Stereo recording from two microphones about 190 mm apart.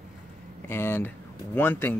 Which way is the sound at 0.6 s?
10° left (ahead or behind).